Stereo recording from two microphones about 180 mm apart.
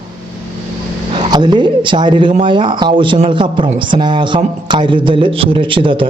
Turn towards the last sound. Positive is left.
turn(degrees=-30)  # may be behind; listen again after turning